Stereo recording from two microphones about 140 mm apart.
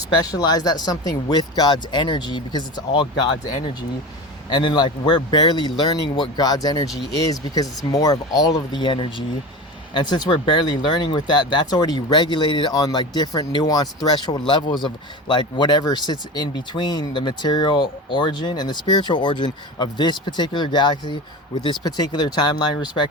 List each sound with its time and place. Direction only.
0.3 s speech: 30° left (ahead or behind)